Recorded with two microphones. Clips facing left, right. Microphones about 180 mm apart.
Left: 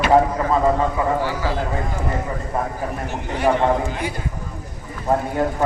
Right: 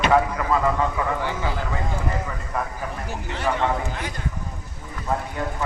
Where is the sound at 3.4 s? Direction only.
50° left (ahead or behind).